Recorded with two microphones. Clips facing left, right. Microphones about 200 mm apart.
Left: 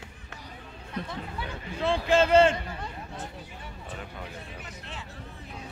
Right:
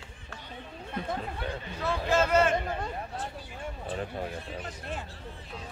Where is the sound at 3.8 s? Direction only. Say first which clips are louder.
Right 7 dB; 35° right (ahead or behind).